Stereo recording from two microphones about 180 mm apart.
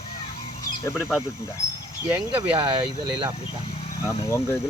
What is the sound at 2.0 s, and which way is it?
Speech, 10° right (ahead or behind).